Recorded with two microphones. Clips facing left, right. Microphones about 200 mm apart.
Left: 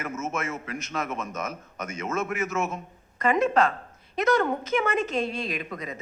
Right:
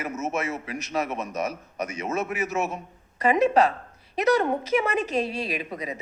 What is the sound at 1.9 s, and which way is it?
Speech, 15° right (ahead or behind).